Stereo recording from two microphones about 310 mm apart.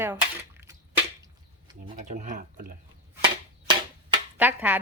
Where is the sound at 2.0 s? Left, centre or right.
Right.